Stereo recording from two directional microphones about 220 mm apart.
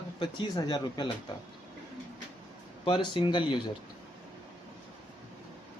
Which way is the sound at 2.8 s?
20° left (ahead or behind).